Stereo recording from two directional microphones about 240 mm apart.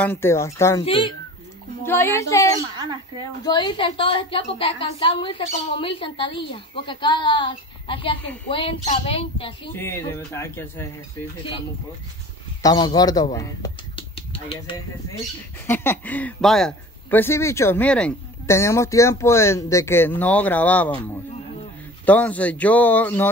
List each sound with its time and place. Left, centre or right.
0.0 s a man's voice: centre
1.9 s a man's voice: centre
9.8 s a man's voice: centre
12.6 s speech: centre
15.6 s a man's voice: centre
22.0 s a man's voice: centre